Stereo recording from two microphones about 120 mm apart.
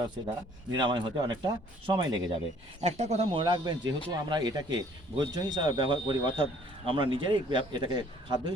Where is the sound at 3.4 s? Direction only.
40° right (ahead or behind).